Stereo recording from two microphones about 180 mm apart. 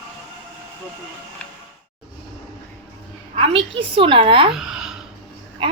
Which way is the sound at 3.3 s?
30° right (ahead or behind).